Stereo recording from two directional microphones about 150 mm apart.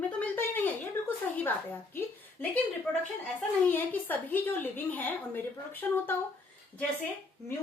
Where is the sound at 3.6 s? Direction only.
10° left (ahead or behind).